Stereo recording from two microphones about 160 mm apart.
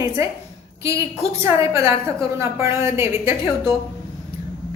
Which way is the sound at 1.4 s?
15° right (ahead or behind).